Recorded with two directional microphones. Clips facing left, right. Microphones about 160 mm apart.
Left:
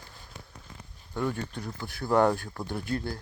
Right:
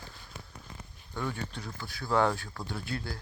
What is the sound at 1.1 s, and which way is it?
Speech, 10° left (ahead or behind).